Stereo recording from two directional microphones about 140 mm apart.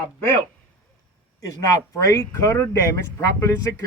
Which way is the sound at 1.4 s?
25° left (ahead or behind).